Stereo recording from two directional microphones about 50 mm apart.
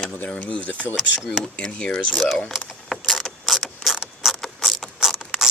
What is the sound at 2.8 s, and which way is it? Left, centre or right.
Mechanisms, centre.